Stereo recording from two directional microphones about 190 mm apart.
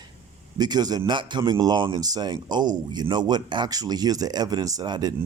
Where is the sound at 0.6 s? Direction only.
20° right (ahead or behind).